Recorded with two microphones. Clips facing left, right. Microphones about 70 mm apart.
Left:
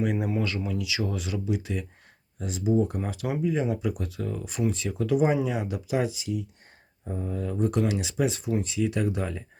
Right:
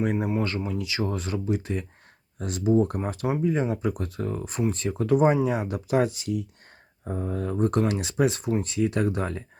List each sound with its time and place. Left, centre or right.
0.0 s speech: right
2.4 s speech: right
3.2 s speech: right
3.5 s speech: right